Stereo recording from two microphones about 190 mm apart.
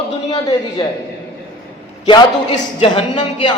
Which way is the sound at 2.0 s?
25° left (ahead or behind).